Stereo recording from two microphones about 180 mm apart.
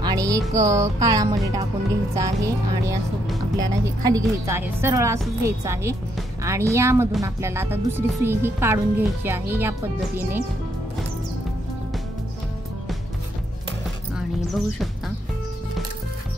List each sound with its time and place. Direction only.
0.0 s music: 20° right (ahead or behind)
2.1 s speech: 15° right (ahead or behind)
14.1 s music: centre (ahead or behind)